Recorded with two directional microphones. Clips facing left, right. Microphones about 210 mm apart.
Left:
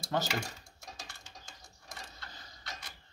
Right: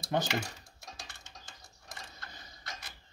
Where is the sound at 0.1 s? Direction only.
20° right (ahead or behind).